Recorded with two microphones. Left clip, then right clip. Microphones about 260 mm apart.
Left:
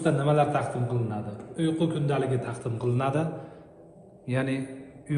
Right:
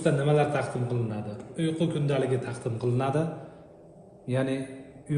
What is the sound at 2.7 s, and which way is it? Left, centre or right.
Speech, left.